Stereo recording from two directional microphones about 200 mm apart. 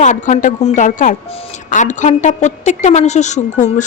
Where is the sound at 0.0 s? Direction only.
40° left (ahead or behind).